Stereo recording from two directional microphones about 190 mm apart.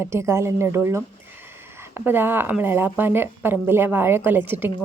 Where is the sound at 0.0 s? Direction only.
15° right (ahead or behind).